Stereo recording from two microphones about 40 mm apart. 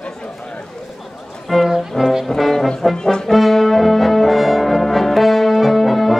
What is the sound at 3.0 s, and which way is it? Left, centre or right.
Music, centre.